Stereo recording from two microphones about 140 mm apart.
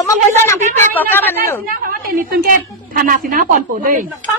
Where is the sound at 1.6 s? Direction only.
90° right; by 4.1 s 70° right (ahead or behind).